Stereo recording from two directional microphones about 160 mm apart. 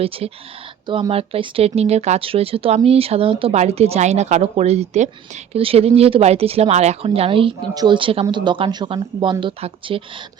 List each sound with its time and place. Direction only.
0.2 s speech: 40° right (ahead or behind)